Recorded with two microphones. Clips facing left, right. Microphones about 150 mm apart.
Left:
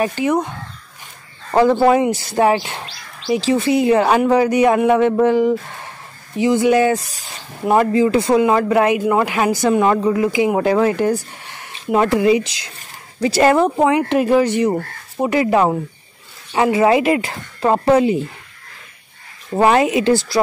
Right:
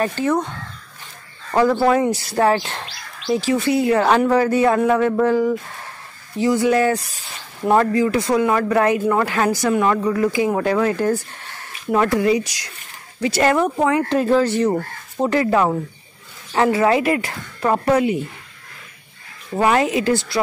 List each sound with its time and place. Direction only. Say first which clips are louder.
0.0 s speech: left 2 dB; 15° left (ahead or behind)
1.5 s speech: left 3 dB; 20° left (ahead or behind)
3.3 s speech: left 3 dB; 25° left (ahead or behind)
7.9 s speech: left 3 dB; 25° left (ahead or behind)
19.5 s speech: left 3 dB; 30° left (ahead or behind)
19.8 s speech: left 3 dB; 20° left (ahead or behind)
20.1 s speech: left 4 dB; 35° left (ahead or behind)